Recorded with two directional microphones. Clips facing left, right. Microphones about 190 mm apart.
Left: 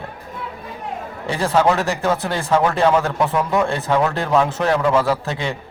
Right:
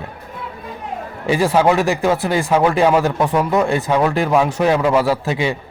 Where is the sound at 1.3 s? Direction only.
15° right (ahead or behind).